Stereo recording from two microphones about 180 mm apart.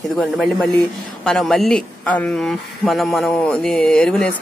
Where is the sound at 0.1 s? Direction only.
Centre (ahead or behind).